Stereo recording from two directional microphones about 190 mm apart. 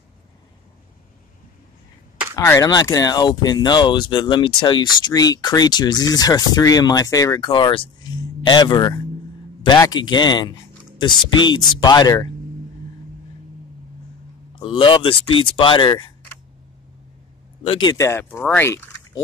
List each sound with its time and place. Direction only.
2.3 s speech: 15° left (ahead or behind)
14.6 s speech: 25° left (ahead or behind)
17.6 s speech: 25° left (ahead or behind)